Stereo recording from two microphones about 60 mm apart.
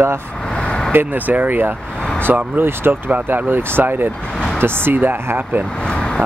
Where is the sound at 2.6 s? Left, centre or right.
Right.